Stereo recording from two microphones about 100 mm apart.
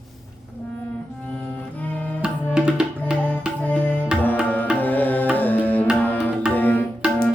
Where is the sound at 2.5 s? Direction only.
10° right (ahead or behind).